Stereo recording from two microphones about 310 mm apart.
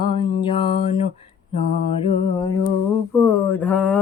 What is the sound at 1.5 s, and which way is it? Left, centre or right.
Mantra, centre.